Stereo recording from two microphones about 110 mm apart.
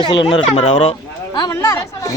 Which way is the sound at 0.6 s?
80° left.